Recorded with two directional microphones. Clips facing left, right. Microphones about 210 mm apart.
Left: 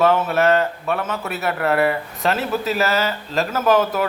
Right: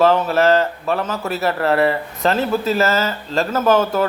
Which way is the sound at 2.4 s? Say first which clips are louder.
Right 4 dB; 35° right (ahead or behind).